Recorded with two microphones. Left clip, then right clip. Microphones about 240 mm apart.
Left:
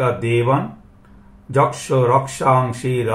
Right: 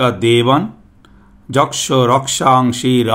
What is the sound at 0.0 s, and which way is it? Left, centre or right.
Speech, right.